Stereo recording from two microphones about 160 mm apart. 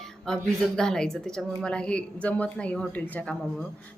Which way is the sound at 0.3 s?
5° left (ahead or behind).